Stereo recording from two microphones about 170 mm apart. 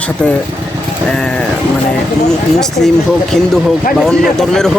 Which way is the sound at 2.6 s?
Centre (ahead or behind).